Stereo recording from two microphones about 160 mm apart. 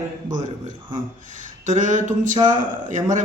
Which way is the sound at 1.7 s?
50° right (ahead or behind).